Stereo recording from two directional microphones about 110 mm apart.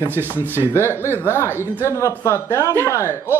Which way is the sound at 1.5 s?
20° right (ahead or behind).